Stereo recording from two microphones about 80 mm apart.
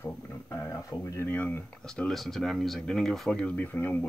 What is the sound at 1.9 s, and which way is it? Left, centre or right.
Speech, centre.